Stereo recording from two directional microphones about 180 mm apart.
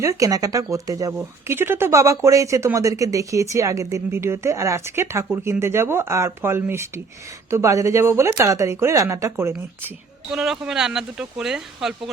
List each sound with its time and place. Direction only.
0.0 s speech: 15° right (ahead or behind)
10.3 s speech: centre (ahead or behind)